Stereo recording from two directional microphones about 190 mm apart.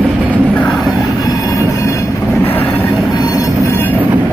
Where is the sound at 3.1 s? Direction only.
20° left (ahead or behind).